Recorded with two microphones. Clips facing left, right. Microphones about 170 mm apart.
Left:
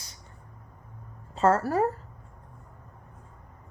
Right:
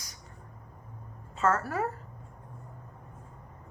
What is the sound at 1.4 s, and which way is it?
Speech, 35° left (ahead or behind).